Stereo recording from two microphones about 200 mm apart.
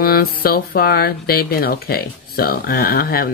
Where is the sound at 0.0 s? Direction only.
50° left (ahead or behind).